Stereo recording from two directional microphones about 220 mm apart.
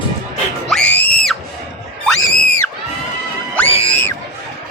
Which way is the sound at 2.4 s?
5° left (ahead or behind).